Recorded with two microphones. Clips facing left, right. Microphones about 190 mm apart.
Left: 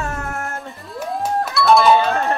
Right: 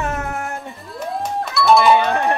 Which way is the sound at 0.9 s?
Centre (ahead or behind).